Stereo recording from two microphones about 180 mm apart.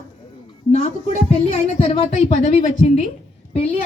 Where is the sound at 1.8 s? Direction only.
35° left (ahead or behind).